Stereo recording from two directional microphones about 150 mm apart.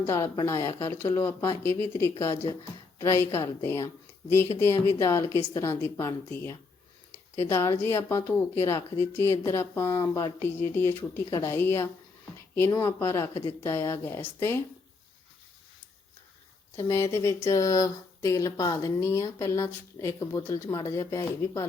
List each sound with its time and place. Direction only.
0.0 s speech: 20° left (ahead or behind)
16.7 s speech: 20° left (ahead or behind)